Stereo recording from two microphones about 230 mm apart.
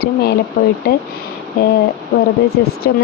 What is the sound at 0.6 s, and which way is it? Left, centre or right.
Speech, left.